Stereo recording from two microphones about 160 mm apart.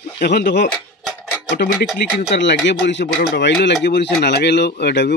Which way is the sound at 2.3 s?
90° left.